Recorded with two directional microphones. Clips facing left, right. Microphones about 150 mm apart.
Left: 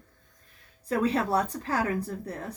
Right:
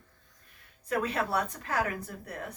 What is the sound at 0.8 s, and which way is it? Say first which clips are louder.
Speech: left 4 dB; 30° left (ahead or behind).